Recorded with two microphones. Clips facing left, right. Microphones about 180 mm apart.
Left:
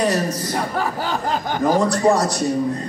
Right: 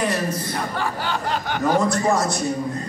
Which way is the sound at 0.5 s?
40° left (ahead or behind).